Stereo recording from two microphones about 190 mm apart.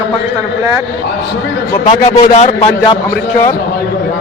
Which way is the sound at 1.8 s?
35° left (ahead or behind).